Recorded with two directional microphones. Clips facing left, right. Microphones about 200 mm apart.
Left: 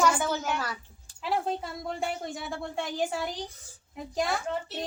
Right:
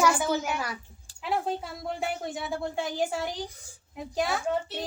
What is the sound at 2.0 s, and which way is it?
A woman's voice, centre (ahead or behind).